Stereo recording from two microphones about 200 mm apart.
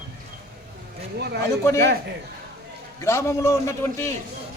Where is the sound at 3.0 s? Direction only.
15° left (ahead or behind).